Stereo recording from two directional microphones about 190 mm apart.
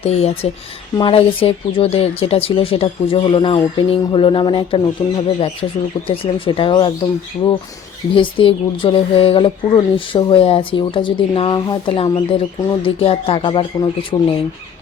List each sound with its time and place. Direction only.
0.0 s speech: 35° left (ahead or behind)
8.1 s speech: 30° left (ahead or behind)